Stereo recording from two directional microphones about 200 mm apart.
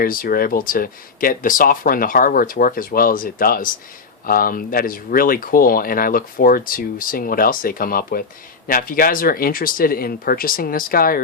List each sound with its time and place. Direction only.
0.0 s speech: 45° left (ahead or behind)